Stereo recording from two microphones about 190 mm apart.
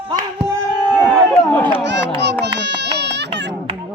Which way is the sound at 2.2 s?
65° right (ahead or behind).